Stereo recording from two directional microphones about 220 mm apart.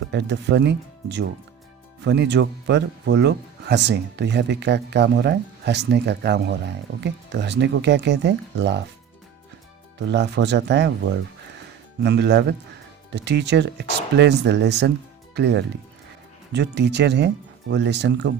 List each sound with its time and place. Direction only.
0.1 s speech: 50° right (ahead or behind)
10.1 s speech: 50° right (ahead or behind)